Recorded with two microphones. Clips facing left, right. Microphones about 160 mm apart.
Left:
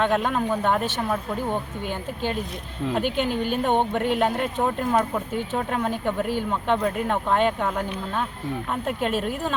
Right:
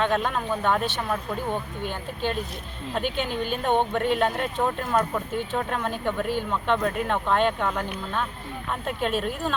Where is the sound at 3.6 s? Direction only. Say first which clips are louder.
Right 1 dB; 15° left (ahead or behind).